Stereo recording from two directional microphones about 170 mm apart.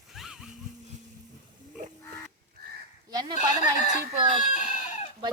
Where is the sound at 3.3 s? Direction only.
45° left (ahead or behind).